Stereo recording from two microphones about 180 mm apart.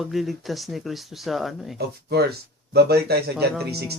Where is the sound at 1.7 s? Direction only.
65° right (ahead or behind).